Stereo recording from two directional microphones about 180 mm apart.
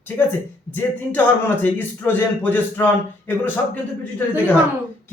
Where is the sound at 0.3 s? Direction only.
10° left (ahead or behind).